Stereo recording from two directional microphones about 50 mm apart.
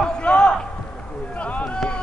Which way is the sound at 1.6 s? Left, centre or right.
Centre.